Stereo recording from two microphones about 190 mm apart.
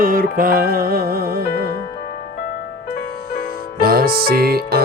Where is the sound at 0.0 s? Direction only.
50° right (ahead or behind).